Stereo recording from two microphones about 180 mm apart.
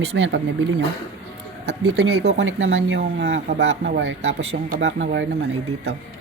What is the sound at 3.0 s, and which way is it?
Speech, 70° right (ahead or behind).